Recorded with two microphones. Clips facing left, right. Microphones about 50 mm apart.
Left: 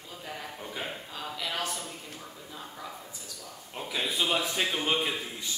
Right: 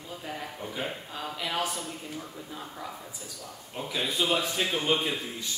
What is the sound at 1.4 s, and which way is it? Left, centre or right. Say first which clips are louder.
Speech: right 3 dB; centre.